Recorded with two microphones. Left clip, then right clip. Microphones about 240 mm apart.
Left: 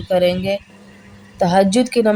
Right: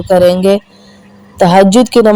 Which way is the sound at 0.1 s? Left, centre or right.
Right.